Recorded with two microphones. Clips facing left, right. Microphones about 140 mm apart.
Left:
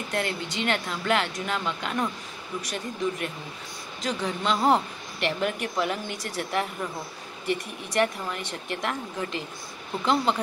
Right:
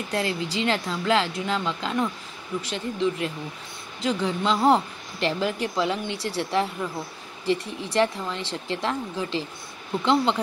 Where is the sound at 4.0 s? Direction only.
30° right (ahead or behind).